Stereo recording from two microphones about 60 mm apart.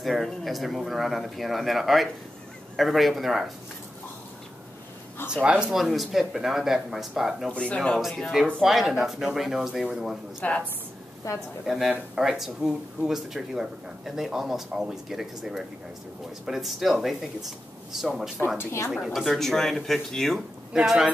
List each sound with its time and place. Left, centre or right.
0.0 s speech: centre
5.3 s speech: centre
5.8 s speech: centre
7.5 s speech: centre
8.6 s speech: centre
10.4 s a woman's voice: left
11.6 s speech: centre
20.7 s speech: centre